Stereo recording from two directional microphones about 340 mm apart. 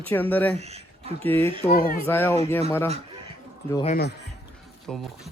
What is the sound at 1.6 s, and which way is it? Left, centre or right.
Speech, left.